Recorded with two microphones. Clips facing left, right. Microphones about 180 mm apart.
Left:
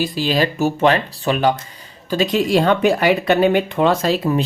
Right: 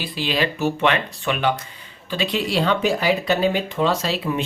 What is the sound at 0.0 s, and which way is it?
Speech, 40° left (ahead or behind).